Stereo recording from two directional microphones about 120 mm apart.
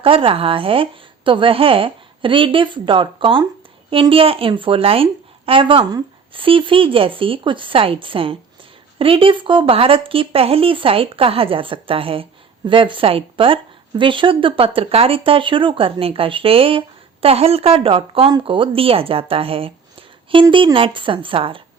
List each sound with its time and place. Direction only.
0.0 s a woman's voice: 50° right (ahead or behind)